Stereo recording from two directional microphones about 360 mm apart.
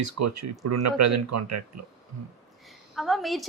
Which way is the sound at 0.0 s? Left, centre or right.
Right.